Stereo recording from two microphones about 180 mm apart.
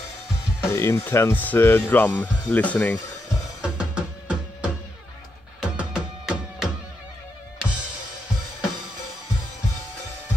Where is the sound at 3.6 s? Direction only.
5° right (ahead or behind).